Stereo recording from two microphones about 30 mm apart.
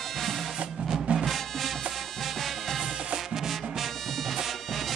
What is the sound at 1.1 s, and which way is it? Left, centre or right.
Music, right.